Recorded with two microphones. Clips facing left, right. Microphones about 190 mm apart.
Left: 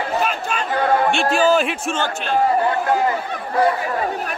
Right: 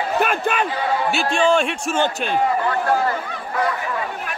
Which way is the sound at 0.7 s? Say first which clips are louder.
Left 4 dB; 55° left (ahead or behind).